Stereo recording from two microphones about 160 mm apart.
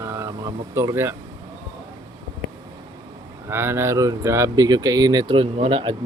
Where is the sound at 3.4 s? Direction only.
15° right (ahead or behind).